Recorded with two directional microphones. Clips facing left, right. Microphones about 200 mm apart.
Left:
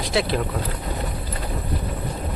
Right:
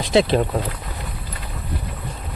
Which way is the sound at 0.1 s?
25° right (ahead or behind).